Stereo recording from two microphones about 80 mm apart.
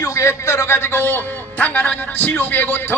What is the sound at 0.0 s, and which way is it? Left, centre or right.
Speech, left.